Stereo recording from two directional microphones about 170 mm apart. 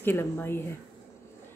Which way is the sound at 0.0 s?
15° left (ahead or behind).